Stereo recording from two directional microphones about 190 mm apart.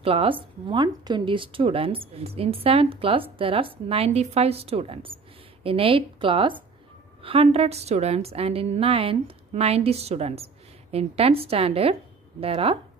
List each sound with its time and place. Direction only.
0.0 s a woman's voice: 30° right (ahead or behind)